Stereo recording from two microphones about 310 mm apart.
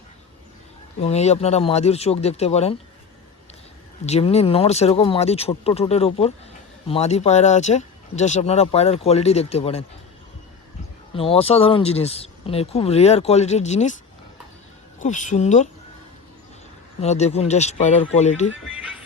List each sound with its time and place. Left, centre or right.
0.9 s speech: left
4.0 s speech: centre
11.1 s speech: centre
15.0 s speech: left
17.0 s speech: left
18.6 s music: centre